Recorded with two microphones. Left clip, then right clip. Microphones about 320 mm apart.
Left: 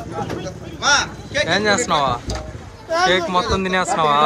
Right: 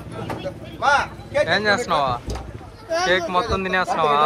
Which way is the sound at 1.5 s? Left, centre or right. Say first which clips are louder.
Left 4 dB; centre.